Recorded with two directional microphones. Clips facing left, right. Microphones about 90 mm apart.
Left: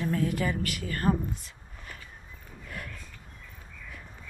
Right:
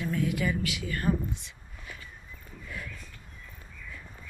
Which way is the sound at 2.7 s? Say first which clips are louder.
Even; 60° left (ahead or behind).